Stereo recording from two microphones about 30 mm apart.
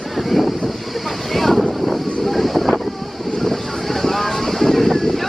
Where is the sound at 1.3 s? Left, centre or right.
Centre.